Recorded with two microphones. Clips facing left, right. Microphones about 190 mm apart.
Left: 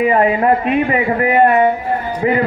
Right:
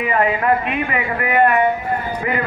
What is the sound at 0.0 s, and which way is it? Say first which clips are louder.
A man's voice: left 5 dB; 35° left (ahead or behind).